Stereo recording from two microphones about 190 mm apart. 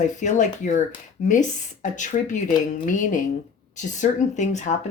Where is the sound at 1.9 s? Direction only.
40° left (ahead or behind).